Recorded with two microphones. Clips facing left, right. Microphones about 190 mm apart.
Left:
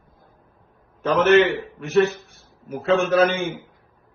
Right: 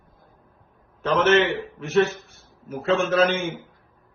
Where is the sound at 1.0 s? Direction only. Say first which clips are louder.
Left 3 dB; centre (ahead or behind).